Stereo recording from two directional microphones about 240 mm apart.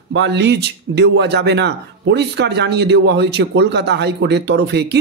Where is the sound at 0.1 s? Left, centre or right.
Right.